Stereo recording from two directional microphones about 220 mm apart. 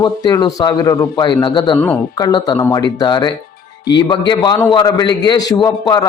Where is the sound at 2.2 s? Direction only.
20° left (ahead or behind).